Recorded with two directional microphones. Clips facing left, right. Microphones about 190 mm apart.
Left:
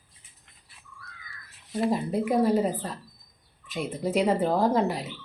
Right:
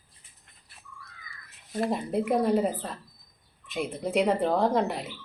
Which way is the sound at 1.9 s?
Centre (ahead or behind).